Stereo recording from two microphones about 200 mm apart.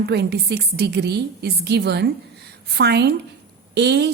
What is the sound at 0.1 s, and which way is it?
Speech, 55° right (ahead or behind).